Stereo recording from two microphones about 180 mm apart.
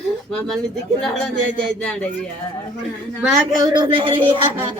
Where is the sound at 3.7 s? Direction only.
30° right (ahead or behind).